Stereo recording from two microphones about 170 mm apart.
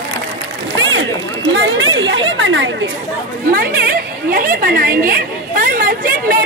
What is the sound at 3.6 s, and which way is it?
A woman's voice, 60° right (ahead or behind).